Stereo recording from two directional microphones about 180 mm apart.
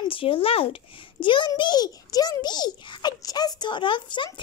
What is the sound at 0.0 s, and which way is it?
Speech, 30° left (ahead or behind).